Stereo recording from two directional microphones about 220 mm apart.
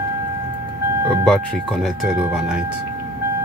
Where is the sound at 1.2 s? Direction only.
Centre (ahead or behind).